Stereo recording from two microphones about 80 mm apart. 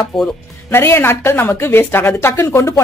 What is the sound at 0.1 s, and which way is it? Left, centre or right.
Speech, centre.